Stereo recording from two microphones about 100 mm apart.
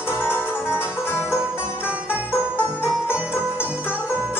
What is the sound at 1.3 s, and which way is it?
Music, 15° right (ahead or behind).